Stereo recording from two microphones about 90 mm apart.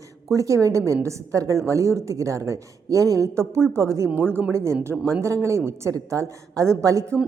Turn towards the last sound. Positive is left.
turn(degrees=-35)  # may be behind; listen again after turning